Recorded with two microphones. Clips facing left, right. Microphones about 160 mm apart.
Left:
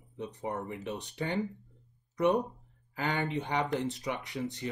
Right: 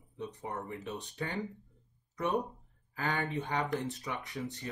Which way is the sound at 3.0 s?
20° left (ahead or behind).